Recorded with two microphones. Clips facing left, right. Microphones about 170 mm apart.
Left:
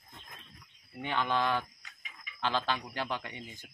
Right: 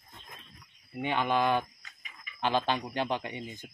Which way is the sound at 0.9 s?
15° right (ahead or behind).